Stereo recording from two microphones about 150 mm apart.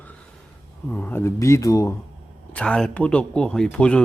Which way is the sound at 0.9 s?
15° left (ahead or behind).